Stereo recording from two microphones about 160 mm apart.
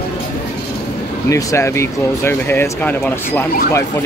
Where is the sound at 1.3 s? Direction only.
20° left (ahead or behind).